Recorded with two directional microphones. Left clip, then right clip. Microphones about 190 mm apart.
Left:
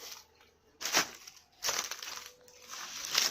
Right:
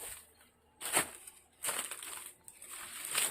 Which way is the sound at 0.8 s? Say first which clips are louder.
Left 4 dB; 35° left (ahead or behind).